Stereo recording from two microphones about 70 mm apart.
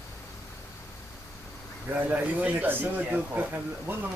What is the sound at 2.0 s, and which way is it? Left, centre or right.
Speech, right.